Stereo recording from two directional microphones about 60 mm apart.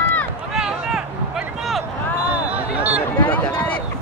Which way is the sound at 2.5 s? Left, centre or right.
Right.